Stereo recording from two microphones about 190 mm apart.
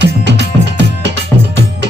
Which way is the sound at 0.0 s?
65° right (ahead or behind).